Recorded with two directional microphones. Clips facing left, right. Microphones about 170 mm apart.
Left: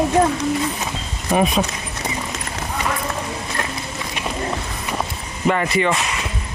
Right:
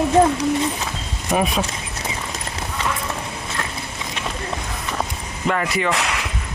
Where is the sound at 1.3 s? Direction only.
Centre (ahead or behind).